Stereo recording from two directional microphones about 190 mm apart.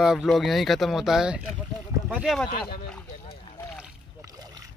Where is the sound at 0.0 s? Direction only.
Centre (ahead or behind).